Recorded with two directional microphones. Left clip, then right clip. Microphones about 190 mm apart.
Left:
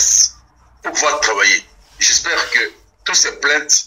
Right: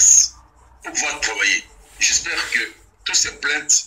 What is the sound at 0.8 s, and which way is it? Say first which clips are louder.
A man's voice: left 7 dB; 30° left (ahead or behind).